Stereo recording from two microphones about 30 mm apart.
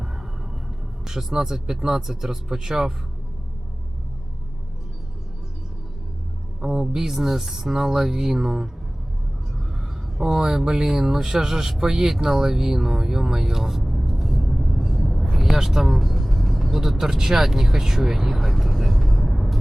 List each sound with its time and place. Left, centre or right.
1.0 s speech: centre
6.6 s speech: centre
10.2 s speech: centre
13.8 s vehicle: centre
14.2 s a sound: centre
15.5 s music: centre
17.0 s speech: centre